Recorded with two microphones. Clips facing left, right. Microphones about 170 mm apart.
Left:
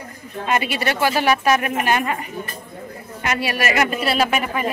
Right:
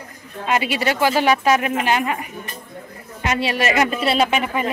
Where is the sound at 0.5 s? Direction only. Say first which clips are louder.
Right 1 dB; 15° right (ahead or behind).